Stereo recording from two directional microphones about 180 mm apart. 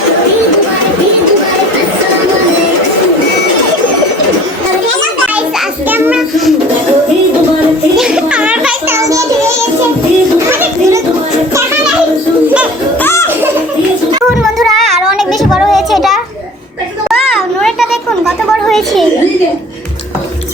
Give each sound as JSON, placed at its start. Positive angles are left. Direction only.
{"t": 5.9, "sound": "child singing", "side_deg": -5}
{"t": 7.9, "sound": "music", "side_deg": -5}
{"t": 9.0, "sound": "child singing", "side_deg": -20}
{"t": 10.5, "sound": "children playing", "side_deg": -15}
{"t": 13.0, "sound": "music", "side_deg": 15}
{"t": 14.3, "sound": "child singing", "side_deg": 0}
{"t": 17.1, "sound": "a sound", "side_deg": 0}